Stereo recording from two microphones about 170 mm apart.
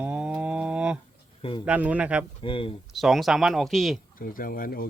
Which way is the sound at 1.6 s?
10° right (ahead or behind).